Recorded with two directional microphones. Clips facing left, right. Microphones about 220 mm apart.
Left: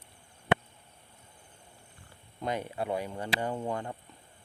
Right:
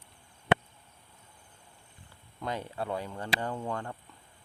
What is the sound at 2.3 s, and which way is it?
Speech, 15° left (ahead or behind).